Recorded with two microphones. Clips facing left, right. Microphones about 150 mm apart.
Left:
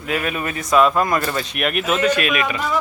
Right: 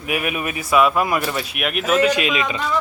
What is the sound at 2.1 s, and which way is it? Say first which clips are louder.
Speech: left 1 dB; 20° right (ahead or behind).